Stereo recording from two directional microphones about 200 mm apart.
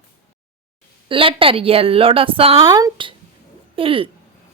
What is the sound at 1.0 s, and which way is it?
A woman's voice, 25° right (ahead or behind).